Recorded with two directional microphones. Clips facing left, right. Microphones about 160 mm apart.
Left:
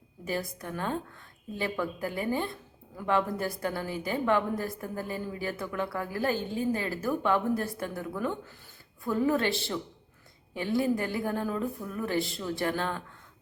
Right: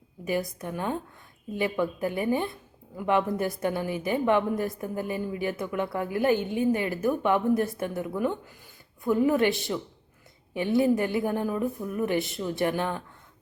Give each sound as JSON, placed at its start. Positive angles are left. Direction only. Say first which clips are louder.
{"t": 0.6, "sound": "a woman's voice", "louder": "right 2 dB", "side_deg": -15}